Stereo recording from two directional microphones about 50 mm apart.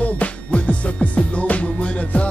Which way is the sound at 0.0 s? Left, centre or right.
Left.